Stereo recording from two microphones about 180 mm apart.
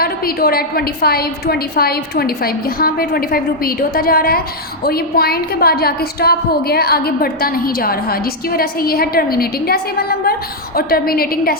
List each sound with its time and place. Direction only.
0.0 s a woman's voice: 55° left (ahead or behind)